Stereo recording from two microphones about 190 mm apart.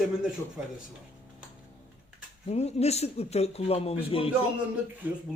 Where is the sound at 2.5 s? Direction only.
35° left (ahead or behind).